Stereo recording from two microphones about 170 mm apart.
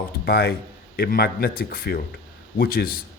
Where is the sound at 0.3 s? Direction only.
70° left (ahead or behind).